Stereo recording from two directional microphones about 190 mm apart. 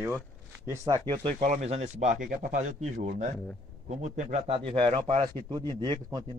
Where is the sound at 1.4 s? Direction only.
35° right (ahead or behind).